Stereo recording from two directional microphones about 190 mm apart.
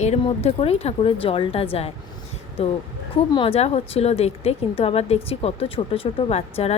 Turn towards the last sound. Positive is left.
turn(degrees=35)  # may be behind; listen again after turning